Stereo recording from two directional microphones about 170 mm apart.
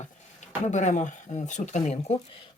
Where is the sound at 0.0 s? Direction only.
45° left (ahead or behind).